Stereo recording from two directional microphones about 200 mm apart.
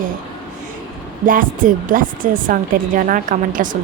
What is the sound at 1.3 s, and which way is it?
Speech, 45° right (ahead or behind).